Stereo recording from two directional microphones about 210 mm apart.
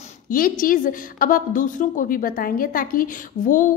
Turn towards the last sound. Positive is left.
turn(degrees=40)  # may be behind; listen again after turning